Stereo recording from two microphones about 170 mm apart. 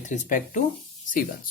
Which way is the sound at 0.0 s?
45° left (ahead or behind).